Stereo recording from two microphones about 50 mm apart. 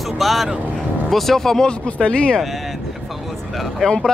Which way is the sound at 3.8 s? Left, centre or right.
Centre.